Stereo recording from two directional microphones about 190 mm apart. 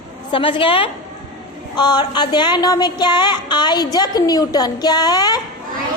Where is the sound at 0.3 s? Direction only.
25° left (ahead or behind).